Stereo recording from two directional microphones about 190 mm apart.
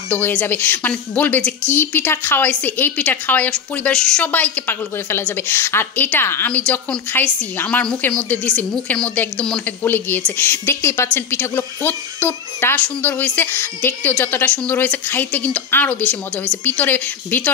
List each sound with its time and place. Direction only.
0.1 s a woman's voice: 10° left (ahead or behind)